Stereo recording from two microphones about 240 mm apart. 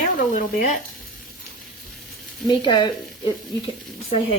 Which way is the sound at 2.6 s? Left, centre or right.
Centre.